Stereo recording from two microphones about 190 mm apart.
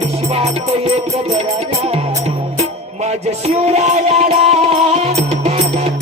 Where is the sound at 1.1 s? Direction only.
35° right (ahead or behind).